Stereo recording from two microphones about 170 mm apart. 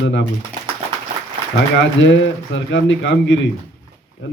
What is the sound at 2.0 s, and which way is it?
A man's voice, 90° left.